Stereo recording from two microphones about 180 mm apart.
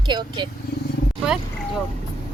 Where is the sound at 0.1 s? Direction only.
25° right (ahead or behind).